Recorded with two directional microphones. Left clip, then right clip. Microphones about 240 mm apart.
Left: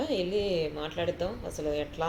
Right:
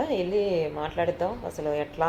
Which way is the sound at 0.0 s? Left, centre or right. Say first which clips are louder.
Right 4 dB; right.